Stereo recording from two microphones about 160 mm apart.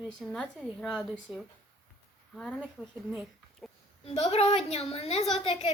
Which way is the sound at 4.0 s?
40° left (ahead or behind).